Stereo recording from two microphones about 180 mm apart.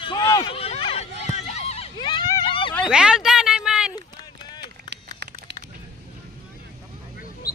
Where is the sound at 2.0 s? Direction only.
25° left (ahead or behind).